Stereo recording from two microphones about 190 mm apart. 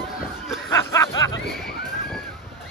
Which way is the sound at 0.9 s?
15° left (ahead or behind).